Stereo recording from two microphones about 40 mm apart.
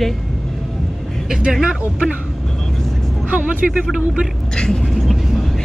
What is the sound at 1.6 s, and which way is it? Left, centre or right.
Speech, centre.